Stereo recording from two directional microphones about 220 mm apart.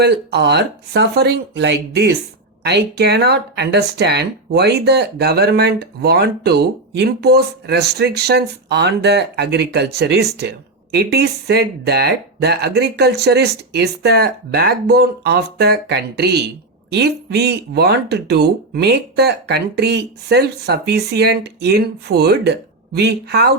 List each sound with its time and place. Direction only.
0.0 s speech: 50° right (ahead or behind)